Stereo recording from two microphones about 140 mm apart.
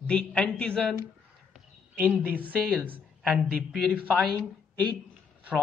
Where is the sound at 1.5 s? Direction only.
10° right (ahead or behind).